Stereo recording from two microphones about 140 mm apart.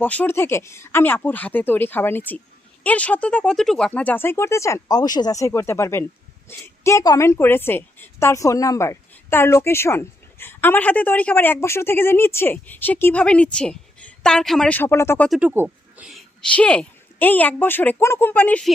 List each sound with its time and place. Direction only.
0.0 s a woman's voice: 10° left (ahead or behind)
15.3 s speech: 10° right (ahead or behind)
16.5 s a woman's voice: 10° left (ahead or behind)